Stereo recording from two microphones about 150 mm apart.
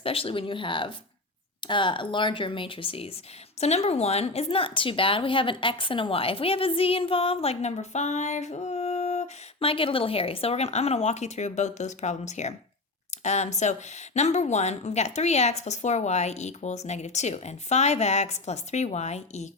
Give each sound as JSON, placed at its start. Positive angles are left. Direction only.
{"t": 0.0, "sound": "a woman's voice", "side_deg": 40}